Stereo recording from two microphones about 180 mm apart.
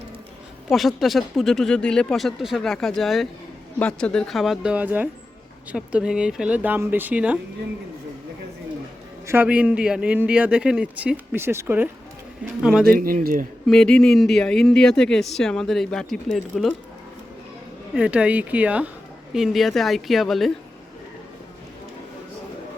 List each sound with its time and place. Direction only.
0.7 s speech: centre (ahead or behind)
9.2 s speech: 10° right (ahead or behind)
12.9 s speech: 50° right (ahead or behind)
13.7 s speech: 5° left (ahead or behind)
17.9 s speech: 5° right (ahead or behind)